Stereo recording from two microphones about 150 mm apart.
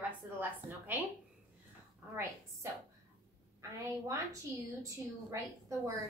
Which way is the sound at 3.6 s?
20° right (ahead or behind).